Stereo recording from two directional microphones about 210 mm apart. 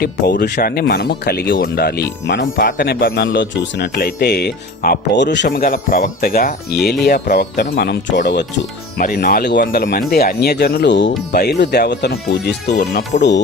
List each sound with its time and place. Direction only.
0.0 s speech: 50° left (ahead or behind)
9.0 s speech: 45° left (ahead or behind)